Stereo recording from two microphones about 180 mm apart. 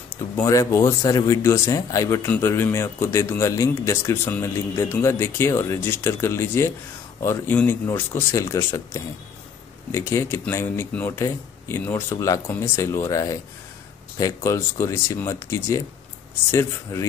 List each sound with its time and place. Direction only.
0.4 s speech: 20° left (ahead or behind)